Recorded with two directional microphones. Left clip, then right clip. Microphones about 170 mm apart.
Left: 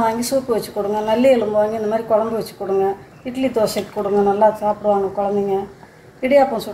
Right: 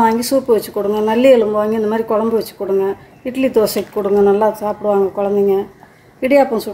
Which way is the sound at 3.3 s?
65° right (ahead or behind).